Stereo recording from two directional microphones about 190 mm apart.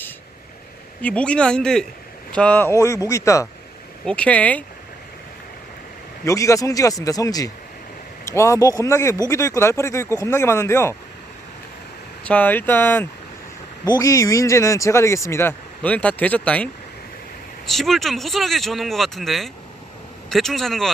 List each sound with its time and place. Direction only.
1.0 s speech: 5° left (ahead or behind)
4.0 s speech: 5° left (ahead or behind)
6.2 s speech: 15° left (ahead or behind)
12.2 s speech: 10° left (ahead or behind)
17.7 s speech: centre (ahead or behind)